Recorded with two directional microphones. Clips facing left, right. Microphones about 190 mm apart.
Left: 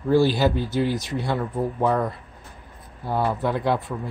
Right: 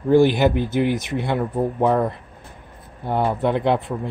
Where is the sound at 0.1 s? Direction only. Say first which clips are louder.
Right 4 dB; 20° right (ahead or behind).